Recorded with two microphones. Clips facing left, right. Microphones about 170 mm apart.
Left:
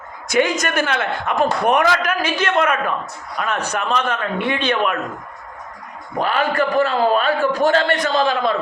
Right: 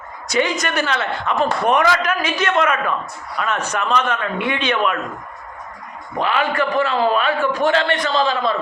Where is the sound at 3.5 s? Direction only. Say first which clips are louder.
Right 1 dB; 35° left (ahead or behind).